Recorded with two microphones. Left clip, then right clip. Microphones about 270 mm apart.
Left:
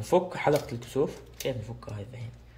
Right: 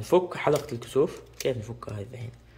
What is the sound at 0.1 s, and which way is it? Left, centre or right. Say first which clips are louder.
A man's voice: right 1 dB; centre.